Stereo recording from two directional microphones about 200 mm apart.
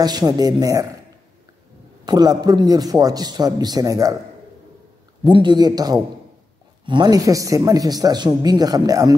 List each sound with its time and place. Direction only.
0.0 s speech: 20° right (ahead or behind)
2.0 s speech: 20° right (ahead or behind)
5.2 s speech: 20° right (ahead or behind)